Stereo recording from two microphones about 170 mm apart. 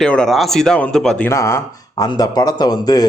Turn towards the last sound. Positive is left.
turn(degrees=25)  # may be behind; listen again after turning